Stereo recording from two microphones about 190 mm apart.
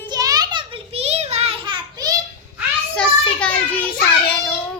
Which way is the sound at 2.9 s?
5° left (ahead or behind).